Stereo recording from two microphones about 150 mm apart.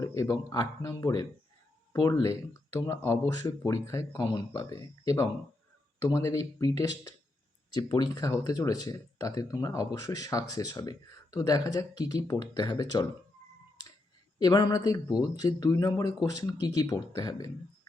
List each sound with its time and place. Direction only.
0.0 s speech: 20° left (ahead or behind)
14.3 s speech: 25° left (ahead or behind)